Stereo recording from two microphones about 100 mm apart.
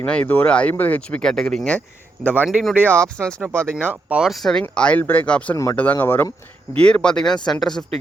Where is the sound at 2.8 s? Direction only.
20° right (ahead or behind).